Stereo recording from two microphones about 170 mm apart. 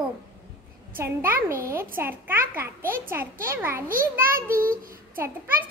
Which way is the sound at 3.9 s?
55° right (ahead or behind).